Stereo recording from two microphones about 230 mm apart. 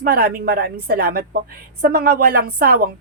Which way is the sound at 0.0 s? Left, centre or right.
Right.